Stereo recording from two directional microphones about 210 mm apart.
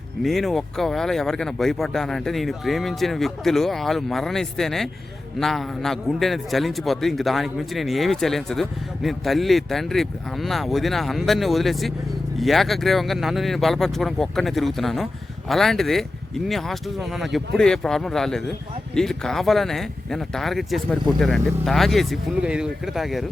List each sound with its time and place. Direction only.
0.2 s a man's voice: centre (ahead or behind)